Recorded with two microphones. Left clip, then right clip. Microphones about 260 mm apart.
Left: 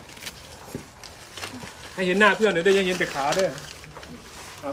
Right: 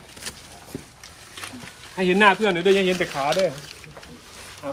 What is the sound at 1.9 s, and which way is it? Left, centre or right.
Speech, right.